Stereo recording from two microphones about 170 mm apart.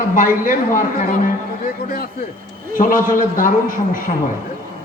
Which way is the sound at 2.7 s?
55° left (ahead or behind).